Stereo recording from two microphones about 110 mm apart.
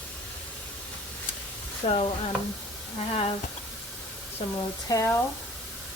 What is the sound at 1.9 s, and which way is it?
Speech, 65° left (ahead or behind).